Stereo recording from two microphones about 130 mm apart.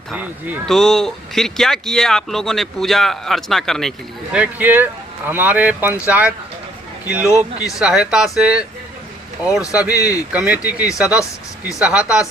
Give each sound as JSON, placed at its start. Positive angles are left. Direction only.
{"t": 0.2, "sound": "speech", "side_deg": -15}
{"t": 0.6, "sound": "speech", "side_deg": 5}
{"t": 4.3, "sound": "speech", "side_deg": -10}
{"t": 7.3, "sound": "speech", "side_deg": 25}
{"t": 7.8, "sound": "speech", "side_deg": -5}
{"t": 9.9, "sound": "speech", "side_deg": 25}
{"t": 10.3, "sound": "speech", "side_deg": -10}